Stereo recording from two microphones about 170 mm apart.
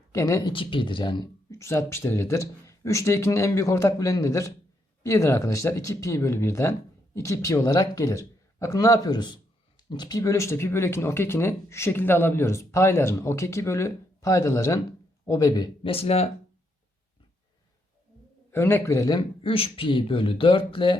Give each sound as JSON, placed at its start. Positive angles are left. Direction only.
{"t": 0.1, "sound": "a man's voice", "side_deg": 20}
{"t": 18.5, "sound": "a man's voice", "side_deg": 15}